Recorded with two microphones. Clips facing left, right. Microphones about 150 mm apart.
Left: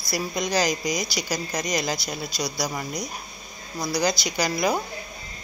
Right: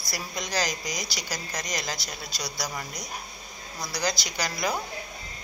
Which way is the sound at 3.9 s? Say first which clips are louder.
Left 5 dB; 15° left (ahead or behind).